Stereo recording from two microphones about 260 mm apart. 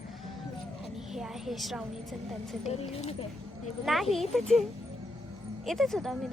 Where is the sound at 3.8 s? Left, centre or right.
Centre.